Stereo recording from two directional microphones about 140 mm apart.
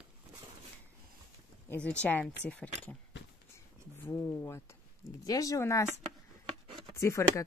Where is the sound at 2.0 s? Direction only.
10° left (ahead or behind).